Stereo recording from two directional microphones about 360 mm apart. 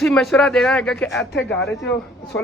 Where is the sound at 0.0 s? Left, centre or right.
Centre.